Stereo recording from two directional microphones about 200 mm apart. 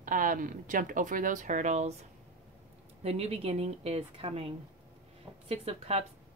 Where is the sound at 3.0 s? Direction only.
30° right (ahead or behind).